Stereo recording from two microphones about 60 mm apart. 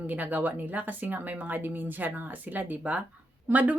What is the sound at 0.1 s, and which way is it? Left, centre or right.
Speech, right.